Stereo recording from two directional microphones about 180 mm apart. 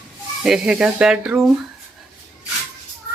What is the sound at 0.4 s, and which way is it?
Speech, 5° right (ahead or behind).